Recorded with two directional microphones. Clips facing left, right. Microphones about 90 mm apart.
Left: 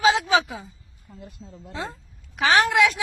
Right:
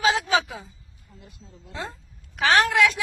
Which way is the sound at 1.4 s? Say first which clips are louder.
Left 7 dB; 40° left (ahead or behind).